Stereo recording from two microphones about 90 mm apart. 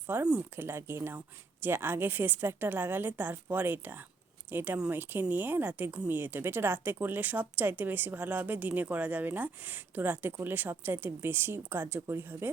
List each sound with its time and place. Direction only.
0.1 s speech: 25° right (ahead or behind)